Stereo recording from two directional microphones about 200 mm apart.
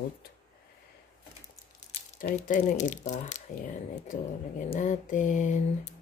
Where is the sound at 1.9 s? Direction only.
40° left (ahead or behind).